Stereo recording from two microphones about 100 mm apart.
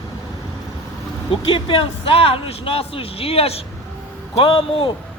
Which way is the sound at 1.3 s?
65° left (ahead or behind).